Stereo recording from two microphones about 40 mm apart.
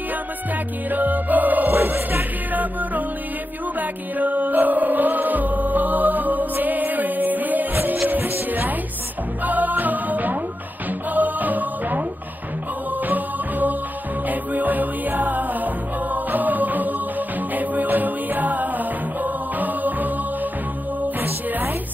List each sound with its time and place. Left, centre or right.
0.8 s music: right
21.2 s music: right